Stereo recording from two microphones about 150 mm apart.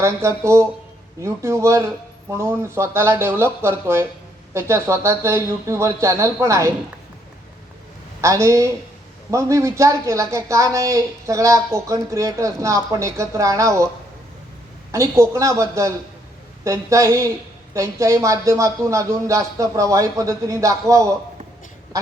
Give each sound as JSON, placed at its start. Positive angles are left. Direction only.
{"t": 0.0, "sound": "speech", "side_deg": -20}
{"t": 8.2, "sound": "speech", "side_deg": -20}
{"t": 14.9, "sound": "speech", "side_deg": -20}